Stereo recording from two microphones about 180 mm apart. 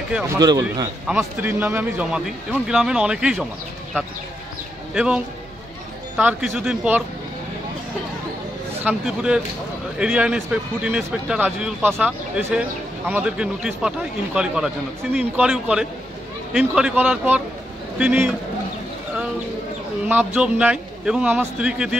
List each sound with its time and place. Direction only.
0.1 s speech: 15° right (ahead or behind)
1.0 s a man's voice: 5° right (ahead or behind)
4.9 s a man's voice: 5° right (ahead or behind)
8.8 s a man's voice: 5° right (ahead or behind)
20.1 s a man's voice: 10° right (ahead or behind)